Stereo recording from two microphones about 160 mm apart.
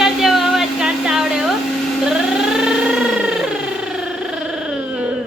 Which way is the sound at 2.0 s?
5° right (ahead or behind).